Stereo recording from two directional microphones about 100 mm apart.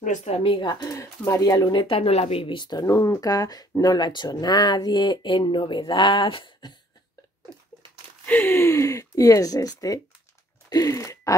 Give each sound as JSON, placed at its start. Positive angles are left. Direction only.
{"t": 0.2, "sound": "speech", "side_deg": 65}
{"t": 0.9, "sound": "speech", "side_deg": 30}
{"t": 2.9, "sound": "speech", "side_deg": 35}
{"t": 8.3, "sound": "speech", "side_deg": 20}
{"t": 10.7, "sound": "gasp", "side_deg": 35}